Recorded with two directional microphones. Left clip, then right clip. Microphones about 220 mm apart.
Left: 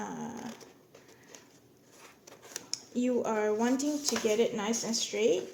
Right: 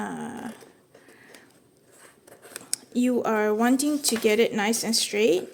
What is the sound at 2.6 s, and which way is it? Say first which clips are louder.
Speech: right 6 dB; 35° right (ahead or behind).